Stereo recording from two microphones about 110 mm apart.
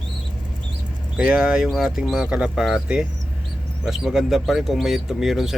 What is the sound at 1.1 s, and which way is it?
Speech, 10° right (ahead or behind).